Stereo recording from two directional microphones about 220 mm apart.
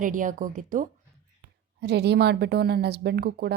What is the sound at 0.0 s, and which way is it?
Speech, 35° right (ahead or behind).